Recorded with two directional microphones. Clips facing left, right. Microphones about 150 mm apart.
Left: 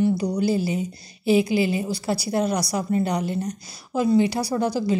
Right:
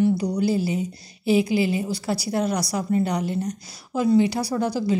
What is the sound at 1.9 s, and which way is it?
Speech, 20° left (ahead or behind).